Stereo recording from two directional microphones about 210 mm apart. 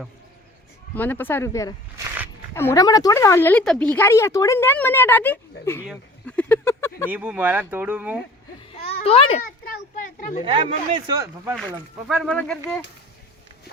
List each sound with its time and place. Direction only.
0.9 s speech: 10° left (ahead or behind)
5.8 s a sound: 5° right (ahead or behind)
6.3 s a sound: 10° left (ahead or behind)
7.1 s speech: 5° right (ahead or behind)
9.0 s a child's voice: 30° left (ahead or behind)
9.6 s a sound: 40° left (ahead or behind)
10.4 s speech: 25° right (ahead or behind)
11.0 s speech: 15° right (ahead or behind)
12.0 s speech: centre (ahead or behind)